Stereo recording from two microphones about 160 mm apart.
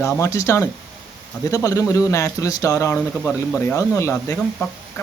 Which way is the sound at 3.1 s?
5° left (ahead or behind).